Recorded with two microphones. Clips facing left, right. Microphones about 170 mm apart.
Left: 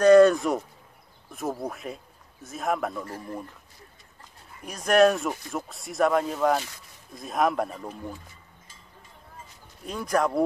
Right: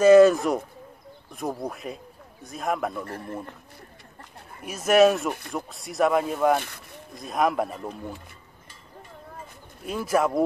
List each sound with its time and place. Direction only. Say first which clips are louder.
0.0 s speech: right 1 dB; 5° right (ahead or behind)
4.6 s speech: right 2 dB; 5° right (ahead or behind)
6.6 s speech: right 3 dB; 60° right (ahead or behind)
7.2 s speech: right 1 dB; centre (ahead or behind)
9.8 s speech: right 2 dB; 5° right (ahead or behind)